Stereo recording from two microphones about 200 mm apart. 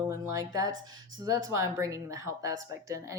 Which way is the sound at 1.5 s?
15° right (ahead or behind).